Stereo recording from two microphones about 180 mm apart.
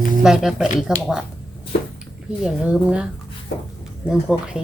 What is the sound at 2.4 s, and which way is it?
Speech, 5° right (ahead or behind).